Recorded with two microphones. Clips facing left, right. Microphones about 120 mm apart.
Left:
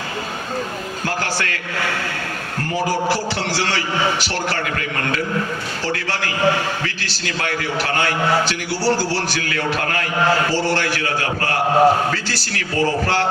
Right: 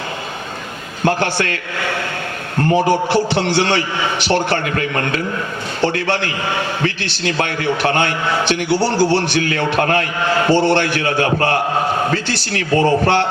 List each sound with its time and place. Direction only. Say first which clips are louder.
1.0 s a man's voice: right 8 dB; 25° right (ahead or behind)
2.6 s a man's voice: right 7 dB; 25° right (ahead or behind)